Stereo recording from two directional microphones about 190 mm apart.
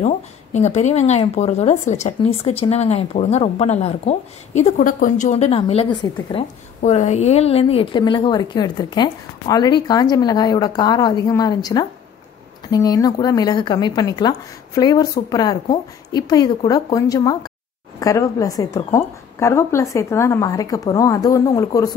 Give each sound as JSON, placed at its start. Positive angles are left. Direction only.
{"t": 0.0, "sound": "a woman's voice", "side_deg": 35}